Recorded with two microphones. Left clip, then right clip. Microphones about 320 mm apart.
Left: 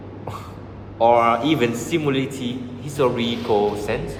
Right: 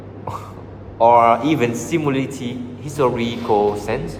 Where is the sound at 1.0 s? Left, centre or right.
Centre.